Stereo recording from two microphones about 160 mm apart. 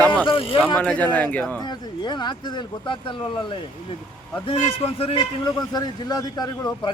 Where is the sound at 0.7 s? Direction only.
5° left (ahead or behind).